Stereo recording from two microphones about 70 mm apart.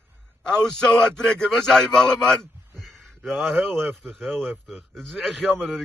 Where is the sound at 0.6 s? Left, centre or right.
Centre.